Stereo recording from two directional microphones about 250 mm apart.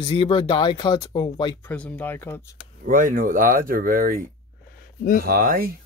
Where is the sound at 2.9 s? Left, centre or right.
Right.